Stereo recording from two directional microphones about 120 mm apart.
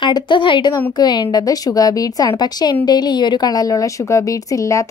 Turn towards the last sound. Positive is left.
turn(degrees=25)  # may be behind; listen again after turning